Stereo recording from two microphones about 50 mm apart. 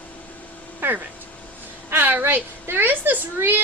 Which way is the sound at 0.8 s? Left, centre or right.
Right.